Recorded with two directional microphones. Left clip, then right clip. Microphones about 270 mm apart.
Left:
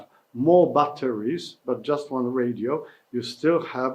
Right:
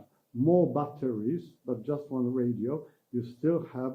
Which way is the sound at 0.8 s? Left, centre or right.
Centre.